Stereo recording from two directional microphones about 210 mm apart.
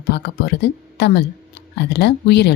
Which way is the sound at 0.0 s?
45° left (ahead or behind).